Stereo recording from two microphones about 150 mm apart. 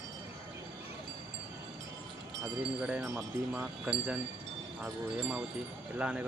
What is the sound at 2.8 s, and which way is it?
Speech, 5° right (ahead or behind).